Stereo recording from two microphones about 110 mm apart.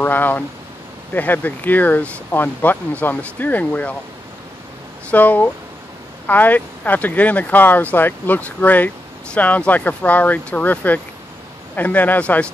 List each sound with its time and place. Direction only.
0.0 s speech: 15° left (ahead or behind)
5.1 s speech: 15° left (ahead or behind)